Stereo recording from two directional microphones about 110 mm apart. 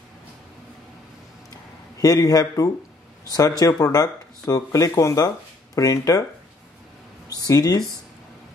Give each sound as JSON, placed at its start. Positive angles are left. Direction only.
{"t": 2.0, "sound": "speech", "side_deg": 35}
{"t": 7.2, "sound": "speech", "side_deg": 30}